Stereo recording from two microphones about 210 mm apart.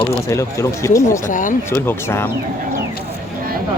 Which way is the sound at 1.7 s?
10° left (ahead or behind).